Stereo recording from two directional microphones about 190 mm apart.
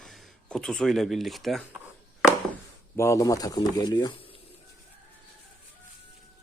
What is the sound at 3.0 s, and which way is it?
Speech, 15° left (ahead or behind).